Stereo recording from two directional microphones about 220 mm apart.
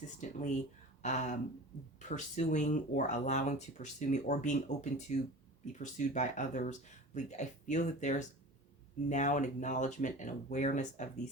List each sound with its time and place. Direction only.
0.2 s speech: 35° left (ahead or behind)